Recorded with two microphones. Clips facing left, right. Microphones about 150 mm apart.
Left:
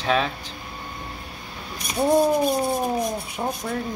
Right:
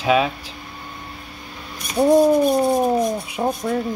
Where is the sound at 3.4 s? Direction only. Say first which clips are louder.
Right 6 dB; 15° right (ahead or behind).